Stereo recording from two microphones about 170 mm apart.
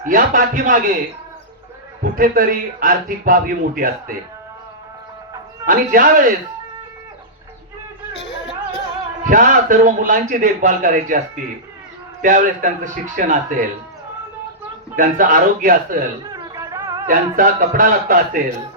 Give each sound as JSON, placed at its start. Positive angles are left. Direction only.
{"t": 0.0, "sound": "a man's voice", "side_deg": -55}
{"t": 2.1, "sound": "a man's voice", "side_deg": -55}
{"t": 5.6, "sound": "a man's voice", "side_deg": -55}
{"t": 9.2, "sound": "a man's voice", "side_deg": -50}
{"t": 14.9, "sound": "a man's voice", "side_deg": -50}
{"t": 16.3, "sound": "a sound", "side_deg": -20}
{"t": 17.1, "sound": "a man's voice", "side_deg": -55}